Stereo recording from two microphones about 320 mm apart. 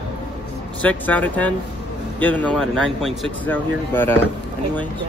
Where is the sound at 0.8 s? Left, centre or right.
Centre.